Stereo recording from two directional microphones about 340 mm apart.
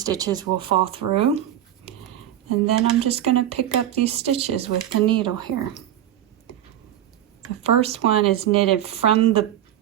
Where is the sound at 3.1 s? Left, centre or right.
Centre.